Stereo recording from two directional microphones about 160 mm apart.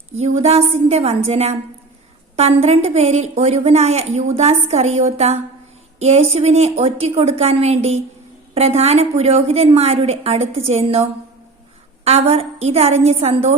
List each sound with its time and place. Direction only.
0.2 s a woman's voice: 40° right (ahead or behind)
12.0 s a woman's voice: 40° right (ahead or behind)